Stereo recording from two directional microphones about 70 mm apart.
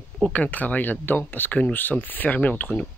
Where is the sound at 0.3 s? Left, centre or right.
Left.